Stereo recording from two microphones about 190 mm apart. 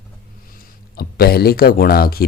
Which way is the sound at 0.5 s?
55° left (ahead or behind).